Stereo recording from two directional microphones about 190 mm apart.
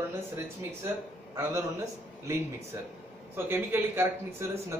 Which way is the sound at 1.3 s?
15° right (ahead or behind).